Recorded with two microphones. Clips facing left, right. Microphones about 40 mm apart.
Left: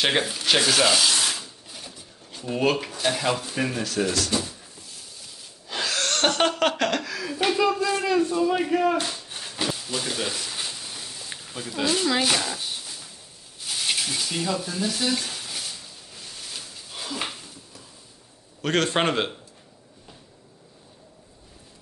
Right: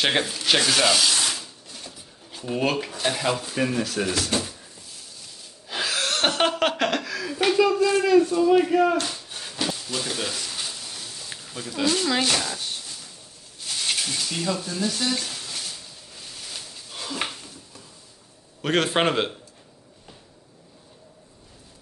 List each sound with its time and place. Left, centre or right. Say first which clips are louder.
0.0 s a sound: even; centre
2.3 s speech: left 1 dB; centre
4.3 s speech: right 1 dB; right
5.7 s laughter: right 1 dB; centre
9.0 s a sound: even; centre
18.6 s a man's voice: right 1 dB; centre